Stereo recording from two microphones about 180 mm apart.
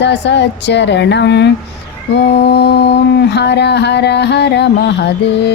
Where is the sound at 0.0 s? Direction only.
75° left (ahead or behind).